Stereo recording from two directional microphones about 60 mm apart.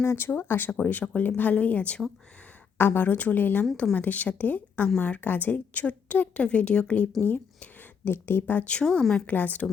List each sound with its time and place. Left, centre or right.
0.0 s speech: left
0.3 s a woman's voice: left
0.7 s a woman's voice: centre
2.7 s a woman's voice: left; by 9.2 s centre
9.2 s a woman's voice: left